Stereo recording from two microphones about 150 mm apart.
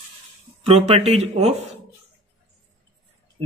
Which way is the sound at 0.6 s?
45° right (ahead or behind).